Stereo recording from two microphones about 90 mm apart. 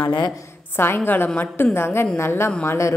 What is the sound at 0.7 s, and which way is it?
A woman's voice, 25° left (ahead or behind).